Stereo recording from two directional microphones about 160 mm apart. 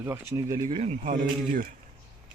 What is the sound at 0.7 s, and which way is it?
Speech, 40° right (ahead or behind).